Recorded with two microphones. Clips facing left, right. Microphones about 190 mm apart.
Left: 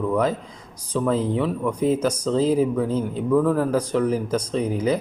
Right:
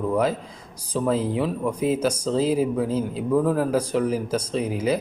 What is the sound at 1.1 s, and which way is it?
Speech, 10° right (ahead or behind).